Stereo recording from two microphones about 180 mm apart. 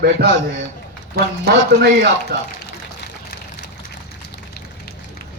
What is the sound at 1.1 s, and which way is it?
A man's voice, 60° right (ahead or behind).